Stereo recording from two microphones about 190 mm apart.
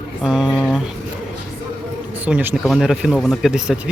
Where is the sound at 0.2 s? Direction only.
Centre (ahead or behind).